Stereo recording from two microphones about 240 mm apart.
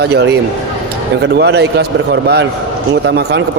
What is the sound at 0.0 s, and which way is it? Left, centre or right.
A man's voice, right.